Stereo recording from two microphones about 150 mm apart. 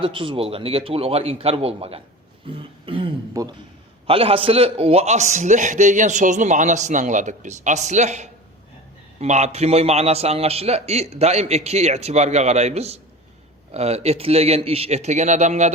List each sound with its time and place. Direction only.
0.0 s a man's voice: 35° right (ahead or behind)
2.5 s throat clearing: 35° right (ahead or behind)
4.0 s a man's voice: 40° right (ahead or behind)